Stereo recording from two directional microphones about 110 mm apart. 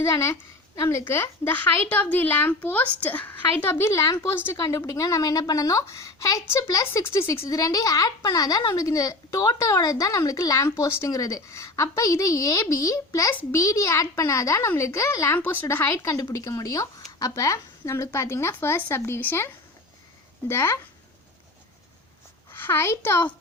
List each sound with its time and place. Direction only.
0.0 s a child's voice: 25° left (ahead or behind)
15.9 s a woman's voice: 30° left (ahead or behind)
20.5 s a child's voice: 25° left (ahead or behind)
22.5 s a child's voice: 20° left (ahead or behind)